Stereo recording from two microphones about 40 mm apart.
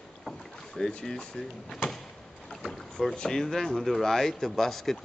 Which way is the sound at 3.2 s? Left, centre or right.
Centre.